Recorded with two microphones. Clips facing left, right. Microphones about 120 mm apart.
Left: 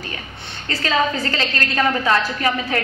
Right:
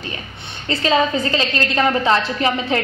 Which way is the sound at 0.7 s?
20° right (ahead or behind).